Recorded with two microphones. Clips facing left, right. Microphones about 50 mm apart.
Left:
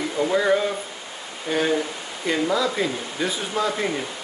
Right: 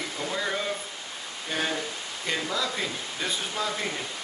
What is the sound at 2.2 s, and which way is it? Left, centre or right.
Speech, centre.